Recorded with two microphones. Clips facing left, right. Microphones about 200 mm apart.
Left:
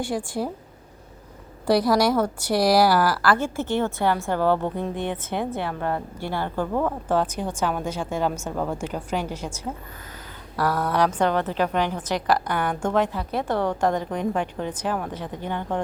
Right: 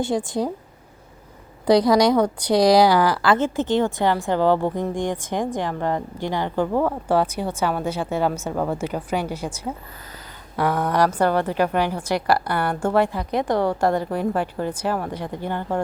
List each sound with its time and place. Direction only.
0.0 s a woman's voice: 20° right (ahead or behind)
1.6 s a woman's voice: 20° right (ahead or behind)